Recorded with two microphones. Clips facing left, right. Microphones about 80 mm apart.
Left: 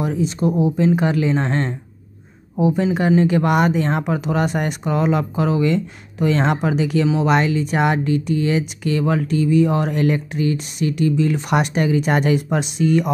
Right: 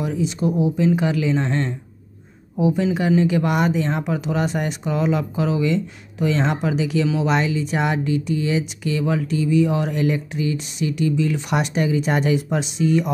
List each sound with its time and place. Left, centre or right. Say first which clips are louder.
0.0 s speech: left 2 dB; left